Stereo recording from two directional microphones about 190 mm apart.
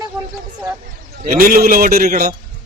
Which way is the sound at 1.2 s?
45° right (ahead or behind).